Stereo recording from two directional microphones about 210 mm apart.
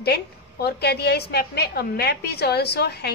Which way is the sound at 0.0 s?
50° left (ahead or behind).